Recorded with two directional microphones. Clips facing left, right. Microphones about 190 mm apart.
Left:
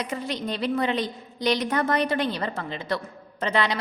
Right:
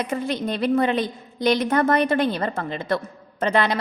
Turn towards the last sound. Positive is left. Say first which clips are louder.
# right 4 dB
turn(degrees=-50)  # may be behind; listen again after turning